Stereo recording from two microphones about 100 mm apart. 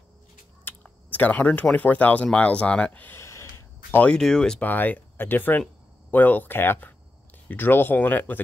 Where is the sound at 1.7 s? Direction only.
15° left (ahead or behind).